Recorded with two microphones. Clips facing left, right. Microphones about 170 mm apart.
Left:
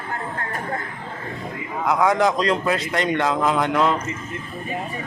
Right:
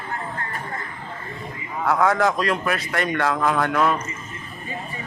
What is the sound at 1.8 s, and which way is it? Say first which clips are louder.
A man's voice: left 1 dB; 15° left (ahead or behind).